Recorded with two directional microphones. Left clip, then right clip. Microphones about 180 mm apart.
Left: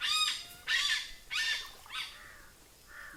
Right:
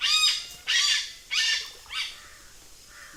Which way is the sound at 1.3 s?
45° left (ahead or behind).